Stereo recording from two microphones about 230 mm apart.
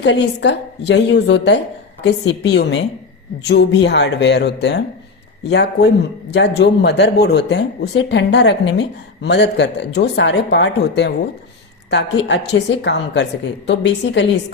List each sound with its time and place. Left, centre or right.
0.0 s speech: left